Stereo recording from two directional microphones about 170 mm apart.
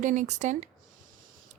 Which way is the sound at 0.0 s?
50° right (ahead or behind).